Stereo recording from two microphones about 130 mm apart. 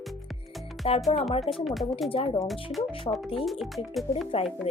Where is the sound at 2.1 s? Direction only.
45° left (ahead or behind).